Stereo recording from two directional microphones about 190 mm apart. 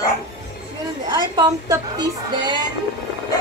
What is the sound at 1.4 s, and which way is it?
A woman's voice, 20° right (ahead or behind).